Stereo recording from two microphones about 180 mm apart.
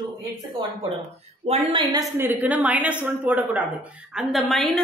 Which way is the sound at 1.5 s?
30° right (ahead or behind).